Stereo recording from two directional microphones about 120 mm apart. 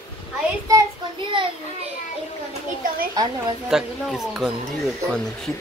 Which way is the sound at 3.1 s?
35° right (ahead or behind).